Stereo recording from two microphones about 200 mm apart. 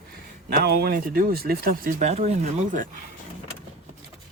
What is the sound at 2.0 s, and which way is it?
Speech, 30° right (ahead or behind).